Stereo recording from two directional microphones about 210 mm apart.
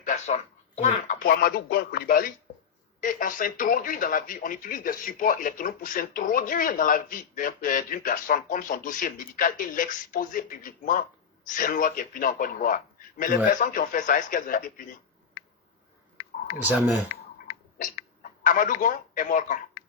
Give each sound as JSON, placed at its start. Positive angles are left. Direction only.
{"t": 0.0, "sound": "speech", "side_deg": 35}
{"t": 16.6, "sound": "speech", "side_deg": -10}
{"t": 17.7, "sound": "speech", "side_deg": 40}